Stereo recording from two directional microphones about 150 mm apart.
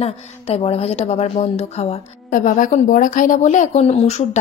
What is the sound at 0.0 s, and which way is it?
Speech, 40° left (ahead or behind).